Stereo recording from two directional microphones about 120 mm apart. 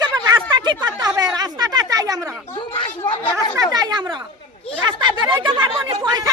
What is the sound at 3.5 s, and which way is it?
Speech, 35° right (ahead or behind).